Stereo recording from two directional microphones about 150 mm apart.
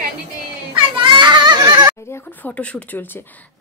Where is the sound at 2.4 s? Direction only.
10° left (ahead or behind).